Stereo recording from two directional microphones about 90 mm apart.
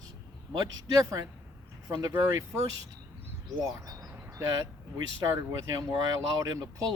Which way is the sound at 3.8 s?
40° right (ahead or behind).